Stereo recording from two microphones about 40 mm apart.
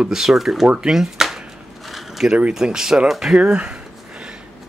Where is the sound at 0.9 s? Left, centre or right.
Centre.